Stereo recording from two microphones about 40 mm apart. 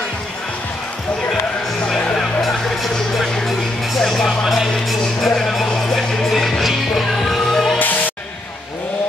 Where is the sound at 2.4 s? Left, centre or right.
Centre.